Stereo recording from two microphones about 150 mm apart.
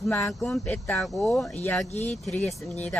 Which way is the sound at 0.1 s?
15° left (ahead or behind).